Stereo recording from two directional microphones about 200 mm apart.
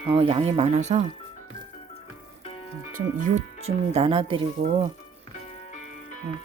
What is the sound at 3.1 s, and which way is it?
Speech, 40° right (ahead or behind).